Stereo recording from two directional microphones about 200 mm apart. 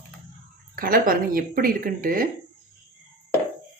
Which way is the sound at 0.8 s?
45° right (ahead or behind).